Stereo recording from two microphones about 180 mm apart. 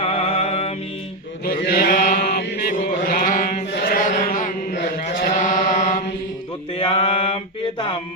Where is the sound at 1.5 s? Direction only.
55° left (ahead or behind).